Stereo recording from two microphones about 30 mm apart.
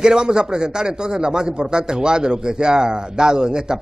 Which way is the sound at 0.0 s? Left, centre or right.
Right.